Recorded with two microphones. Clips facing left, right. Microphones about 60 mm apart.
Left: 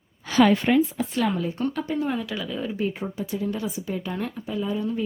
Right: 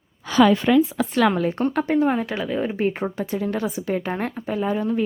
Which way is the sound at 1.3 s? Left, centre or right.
Right.